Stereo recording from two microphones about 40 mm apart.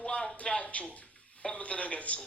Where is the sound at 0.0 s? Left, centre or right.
Left.